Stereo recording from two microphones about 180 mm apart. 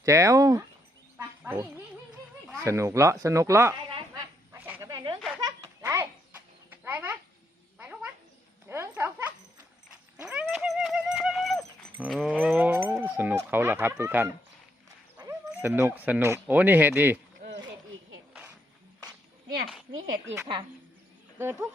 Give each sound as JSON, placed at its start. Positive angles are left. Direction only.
{"t": 0.0, "sound": "speech", "side_deg": -15}
{"t": 4.5, "sound": "a sound", "side_deg": -10}
{"t": 6.7, "sound": "bird", "side_deg": -10}
{"t": 7.8, "sound": "cat", "side_deg": -5}
{"t": 8.7, "sound": "a sound", "side_deg": -15}
{"t": 10.4, "sound": "horse", "side_deg": 0}
{"t": 12.0, "sound": "speech", "side_deg": 0}
{"t": 20.3, "sound": "speech", "side_deg": -20}